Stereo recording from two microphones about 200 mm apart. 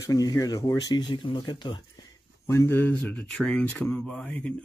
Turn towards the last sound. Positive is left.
turn(degrees=5)  # may be behind; listen again after turning